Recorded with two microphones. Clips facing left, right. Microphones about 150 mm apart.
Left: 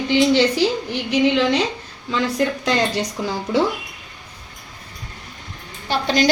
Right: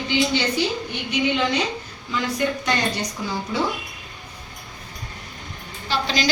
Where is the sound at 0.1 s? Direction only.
90° left.